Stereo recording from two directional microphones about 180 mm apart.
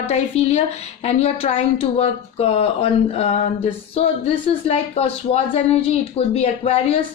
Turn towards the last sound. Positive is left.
turn(degrees=35)  # may be behind; listen again after turning